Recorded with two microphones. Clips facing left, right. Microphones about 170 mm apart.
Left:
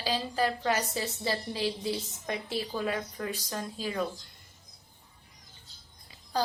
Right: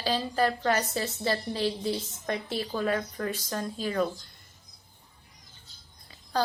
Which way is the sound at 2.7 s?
10° left (ahead or behind).